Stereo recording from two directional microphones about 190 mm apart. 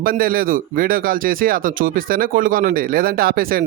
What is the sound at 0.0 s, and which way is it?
Speech, 50° right (ahead or behind).